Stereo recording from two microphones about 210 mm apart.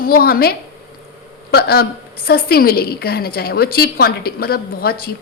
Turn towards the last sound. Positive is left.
turn(degrees=45)  # may be behind; listen again after turning